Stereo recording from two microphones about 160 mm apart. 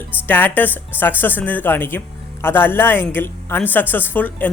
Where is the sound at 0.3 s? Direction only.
10° left (ahead or behind).